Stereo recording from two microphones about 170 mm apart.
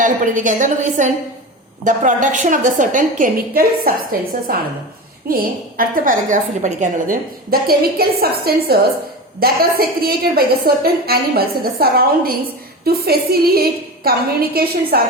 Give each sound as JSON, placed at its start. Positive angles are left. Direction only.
{"t": 0.0, "sound": "a woman's voice", "side_deg": -50}
{"t": 5.3, "sound": "a woman's voice", "side_deg": -60}
{"t": 7.5, "sound": "a woman's voice", "side_deg": -65}